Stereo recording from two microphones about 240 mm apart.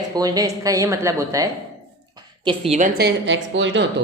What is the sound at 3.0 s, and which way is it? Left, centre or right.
Speech, right.